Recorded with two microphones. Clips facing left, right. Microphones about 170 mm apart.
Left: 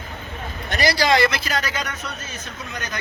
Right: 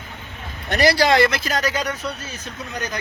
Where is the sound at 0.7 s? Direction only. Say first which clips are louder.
Right 3 dB; 60° right (ahead or behind); by 2.1 s 35° right (ahead or behind).